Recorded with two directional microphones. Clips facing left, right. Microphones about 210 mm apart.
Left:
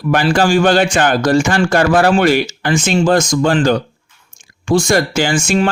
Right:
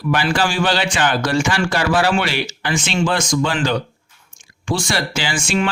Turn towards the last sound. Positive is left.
turn(degrees=45)  # may be behind; listen again after turning